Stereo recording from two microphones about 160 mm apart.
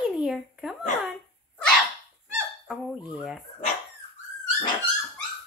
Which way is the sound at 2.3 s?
5° right (ahead or behind).